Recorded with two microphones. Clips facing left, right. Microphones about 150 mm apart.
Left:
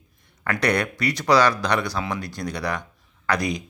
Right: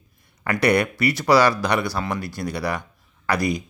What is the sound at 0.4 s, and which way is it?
Speech, 10° right (ahead or behind).